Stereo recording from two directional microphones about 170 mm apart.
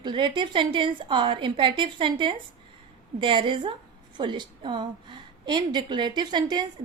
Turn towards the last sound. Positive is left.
turn(degrees=-25)  # may be behind; listen again after turning